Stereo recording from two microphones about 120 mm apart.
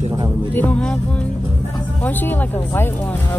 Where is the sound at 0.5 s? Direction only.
10° left (ahead or behind).